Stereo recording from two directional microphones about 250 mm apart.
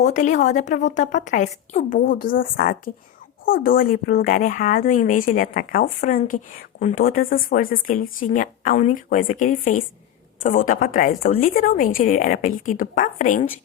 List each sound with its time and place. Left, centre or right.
0.0 s a woman's voice: left